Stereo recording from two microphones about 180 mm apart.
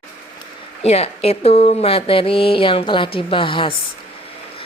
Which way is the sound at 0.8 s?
35° left (ahead or behind).